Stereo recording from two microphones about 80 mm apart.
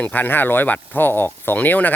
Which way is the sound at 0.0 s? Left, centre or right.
Left.